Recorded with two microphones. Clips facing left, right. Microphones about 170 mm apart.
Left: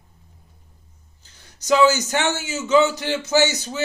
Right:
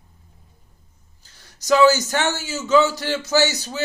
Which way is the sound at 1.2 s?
20° left (ahead or behind).